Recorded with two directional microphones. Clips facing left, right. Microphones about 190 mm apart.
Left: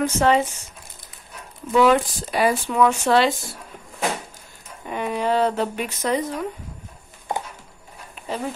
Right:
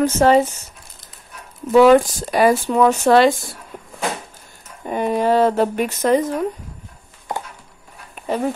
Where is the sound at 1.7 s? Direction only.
40° right (ahead or behind).